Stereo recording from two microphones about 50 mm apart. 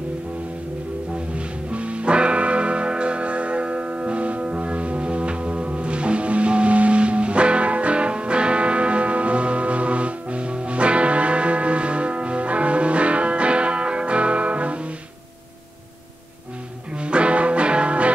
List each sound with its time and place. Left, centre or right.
1.1 s music: right
16.9 s music: right